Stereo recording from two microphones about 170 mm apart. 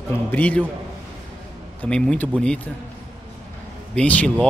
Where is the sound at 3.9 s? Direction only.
5° left (ahead or behind).